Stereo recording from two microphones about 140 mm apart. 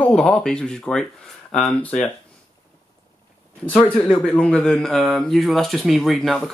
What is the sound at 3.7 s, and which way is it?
Speech, 10° left (ahead or behind).